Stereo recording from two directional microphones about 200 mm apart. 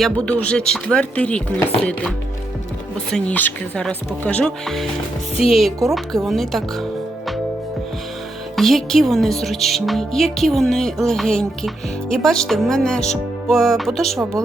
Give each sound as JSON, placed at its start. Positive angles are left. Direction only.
{"t": 0.0, "sound": "a woman's voice", "side_deg": 5}
{"t": 8.5, "sound": "a woman's voice", "side_deg": 0}